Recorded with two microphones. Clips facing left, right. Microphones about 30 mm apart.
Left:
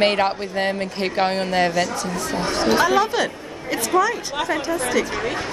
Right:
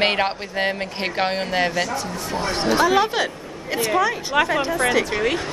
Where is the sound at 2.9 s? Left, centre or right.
Centre.